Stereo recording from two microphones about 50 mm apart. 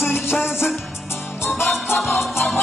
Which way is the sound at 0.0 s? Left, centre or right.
Left.